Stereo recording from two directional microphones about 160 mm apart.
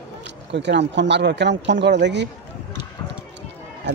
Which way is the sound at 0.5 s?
90° right.